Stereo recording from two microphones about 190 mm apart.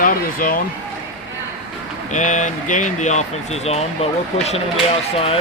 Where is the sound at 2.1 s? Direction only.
40° left (ahead or behind).